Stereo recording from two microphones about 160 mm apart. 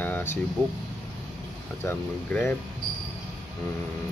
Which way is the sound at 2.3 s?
5° left (ahead or behind).